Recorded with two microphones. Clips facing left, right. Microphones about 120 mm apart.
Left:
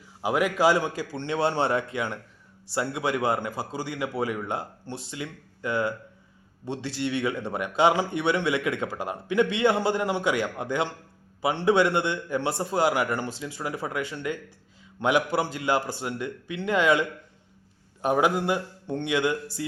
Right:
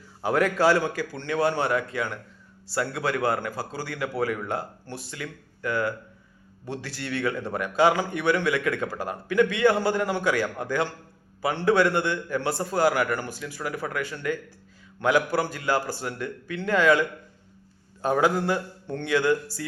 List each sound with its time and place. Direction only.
0.2 s a man's voice: 10° left (ahead or behind)